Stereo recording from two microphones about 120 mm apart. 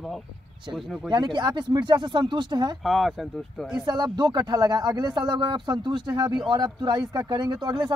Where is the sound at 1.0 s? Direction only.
40° right (ahead or behind).